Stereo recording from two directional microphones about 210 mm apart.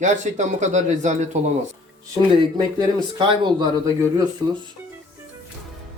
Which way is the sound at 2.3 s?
20° right (ahead or behind).